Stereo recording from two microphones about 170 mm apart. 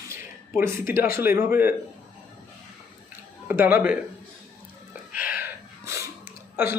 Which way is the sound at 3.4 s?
15° right (ahead or behind).